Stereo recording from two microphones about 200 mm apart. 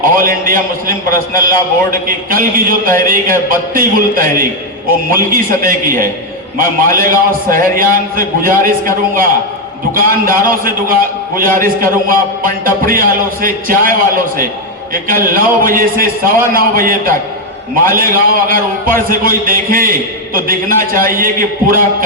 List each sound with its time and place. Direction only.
0.0 s a man's voice: 45° right (ahead or behind)
14.9 s a man's voice: 45° right (ahead or behind)